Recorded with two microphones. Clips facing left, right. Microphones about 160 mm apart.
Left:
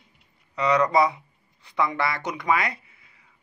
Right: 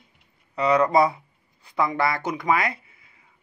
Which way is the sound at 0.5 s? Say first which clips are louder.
Right 2 dB; 30° right (ahead or behind).